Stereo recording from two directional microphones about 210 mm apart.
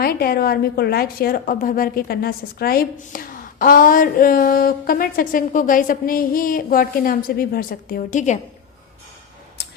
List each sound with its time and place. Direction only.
0.0 s a woman's voice: 45° left (ahead or behind)